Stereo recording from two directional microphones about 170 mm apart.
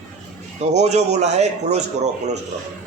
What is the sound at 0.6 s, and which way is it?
A man's voice, 40° right (ahead or behind).